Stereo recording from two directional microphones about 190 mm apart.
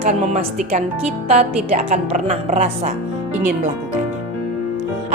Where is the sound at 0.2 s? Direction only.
35° right (ahead or behind).